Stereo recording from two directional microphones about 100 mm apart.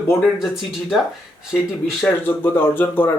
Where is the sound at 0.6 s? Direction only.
Centre (ahead or behind).